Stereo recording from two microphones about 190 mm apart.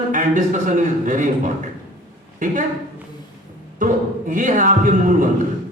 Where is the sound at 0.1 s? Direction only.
40° right (ahead or behind).